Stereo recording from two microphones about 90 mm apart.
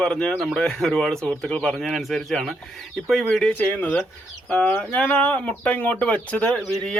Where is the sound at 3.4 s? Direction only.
15° left (ahead or behind).